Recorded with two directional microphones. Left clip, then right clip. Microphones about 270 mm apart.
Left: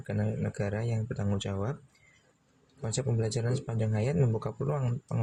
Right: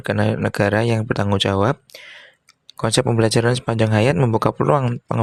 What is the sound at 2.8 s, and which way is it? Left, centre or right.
Speech, right.